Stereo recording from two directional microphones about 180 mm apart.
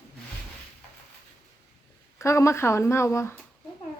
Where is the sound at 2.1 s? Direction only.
15° left (ahead or behind).